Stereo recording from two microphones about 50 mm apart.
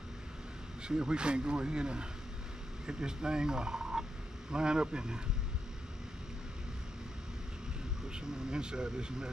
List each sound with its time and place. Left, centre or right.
0.8 s speech: centre
8.1 s speech: centre